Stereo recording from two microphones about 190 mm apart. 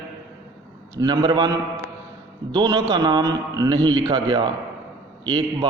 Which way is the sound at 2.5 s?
20° right (ahead or behind).